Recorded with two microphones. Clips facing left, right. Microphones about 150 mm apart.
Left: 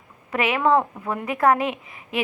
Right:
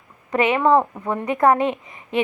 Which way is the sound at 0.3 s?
5° left (ahead or behind).